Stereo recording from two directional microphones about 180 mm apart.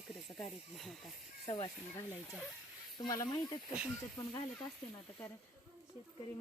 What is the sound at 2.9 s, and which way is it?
Speech, 20° left (ahead or behind).